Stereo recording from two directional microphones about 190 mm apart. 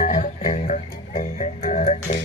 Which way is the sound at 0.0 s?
40° left (ahead or behind).